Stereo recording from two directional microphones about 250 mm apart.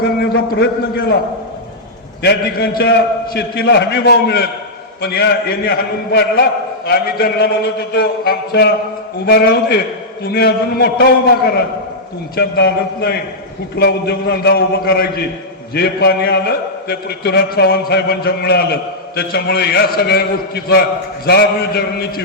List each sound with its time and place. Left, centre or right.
0.0 s a man's voice: left
2.2 s a man's voice: left
12.4 s a man's voice: left